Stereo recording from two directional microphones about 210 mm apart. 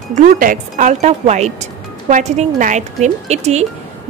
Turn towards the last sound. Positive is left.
turn(degrees=-30)  # may be behind; listen again after turning